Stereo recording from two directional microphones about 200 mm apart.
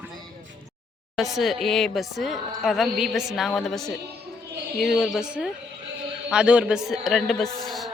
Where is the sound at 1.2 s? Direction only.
Centre (ahead or behind).